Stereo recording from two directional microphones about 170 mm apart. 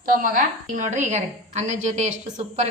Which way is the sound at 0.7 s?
45° right (ahead or behind).